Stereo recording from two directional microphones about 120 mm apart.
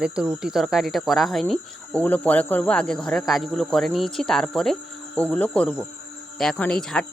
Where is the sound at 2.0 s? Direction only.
10° left (ahead or behind).